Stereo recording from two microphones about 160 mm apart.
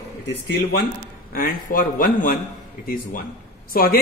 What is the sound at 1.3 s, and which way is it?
A man's voice, 65° left (ahead or behind).